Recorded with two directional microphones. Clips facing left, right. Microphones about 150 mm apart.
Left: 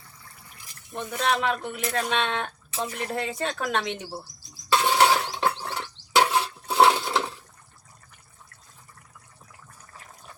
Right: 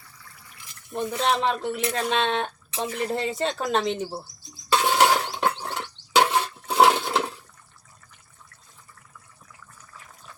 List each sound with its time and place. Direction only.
0.9 s speech: 30° right (ahead or behind)
4.7 s a sound: centre (ahead or behind)
6.7 s toilet flush: 5° right (ahead or behind)